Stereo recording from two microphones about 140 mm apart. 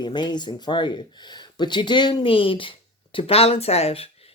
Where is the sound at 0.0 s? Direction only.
30° left (ahead or behind).